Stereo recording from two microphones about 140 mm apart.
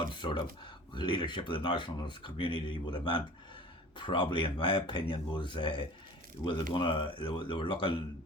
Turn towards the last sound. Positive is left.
turn(degrees=35)  # may be behind; listen again after turning